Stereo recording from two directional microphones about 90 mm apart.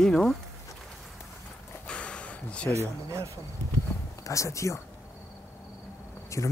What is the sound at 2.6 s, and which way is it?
Speech, 35° right (ahead or behind).